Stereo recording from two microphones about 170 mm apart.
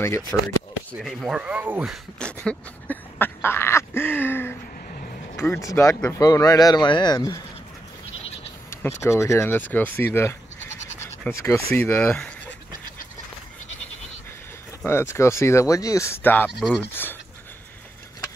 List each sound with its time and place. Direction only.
0.0 s speech: 15° left (ahead or behind)
1.0 s speech: 5° right (ahead or behind)
2.1 s duck: 5° left (ahead or behind)
5.3 s speech: 15° left (ahead or behind)
8.6 s speech: 15° left (ahead or behind)
11.0 s scratch: 15° left (ahead or behind)
11.7 s speech: 10° left (ahead or behind)
14.9 s speech: 15° left (ahead or behind)
16.4 s speech: centre (ahead or behind)
16.9 s a sound: 10° left (ahead or behind)